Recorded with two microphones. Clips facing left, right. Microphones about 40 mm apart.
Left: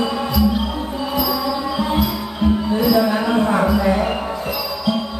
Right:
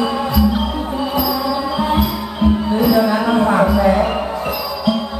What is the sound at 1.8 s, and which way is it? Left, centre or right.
Music, centre.